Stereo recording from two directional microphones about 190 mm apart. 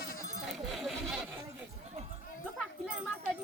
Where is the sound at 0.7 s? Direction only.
Centre (ahead or behind).